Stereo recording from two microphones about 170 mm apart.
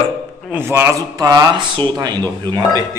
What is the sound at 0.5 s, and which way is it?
A man's voice, 15° right (ahead or behind).